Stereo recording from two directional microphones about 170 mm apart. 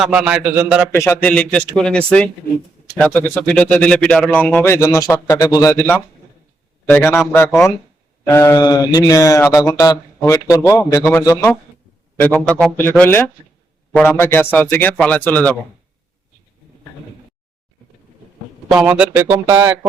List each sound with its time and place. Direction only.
0.0 s a man's voice: 5° right (ahead or behind)
0.9 s speech: 15° left (ahead or behind)
12.2 s speech: 5° left (ahead or behind)
18.7 s speech: 10° right (ahead or behind)